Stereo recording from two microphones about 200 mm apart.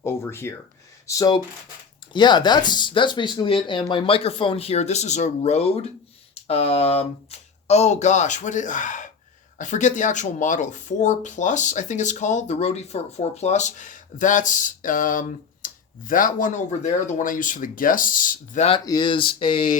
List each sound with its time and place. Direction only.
0.0 s speech: 10° left (ahead or behind); by 18.8 s 35° left (ahead or behind)
18.9 s speech: 20° left (ahead or behind)